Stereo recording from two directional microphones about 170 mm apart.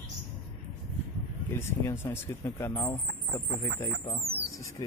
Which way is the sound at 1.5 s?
15° left (ahead or behind).